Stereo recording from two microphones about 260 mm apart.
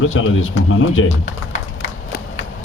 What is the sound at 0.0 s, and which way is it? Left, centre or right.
Speech, left.